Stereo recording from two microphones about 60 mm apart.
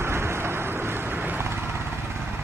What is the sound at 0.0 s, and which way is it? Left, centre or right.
Vehicle, right.